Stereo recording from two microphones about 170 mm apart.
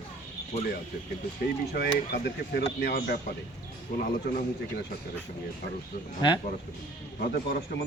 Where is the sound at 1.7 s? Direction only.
70° left (ahead or behind).